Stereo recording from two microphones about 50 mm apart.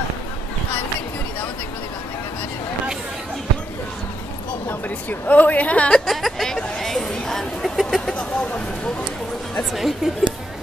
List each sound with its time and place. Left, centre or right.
4.6 s a woman's voice: left
5.9 s a sound: centre
9.8 s a woman's voice: centre